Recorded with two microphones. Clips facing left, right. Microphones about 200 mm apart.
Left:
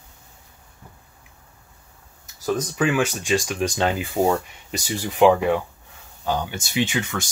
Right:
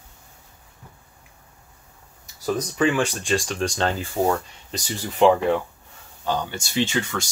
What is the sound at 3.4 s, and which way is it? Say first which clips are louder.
Speech: left 1 dB; 15° left (ahead or behind).